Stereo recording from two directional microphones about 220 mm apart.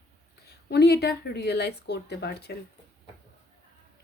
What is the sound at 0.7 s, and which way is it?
Speech, 45° left (ahead or behind).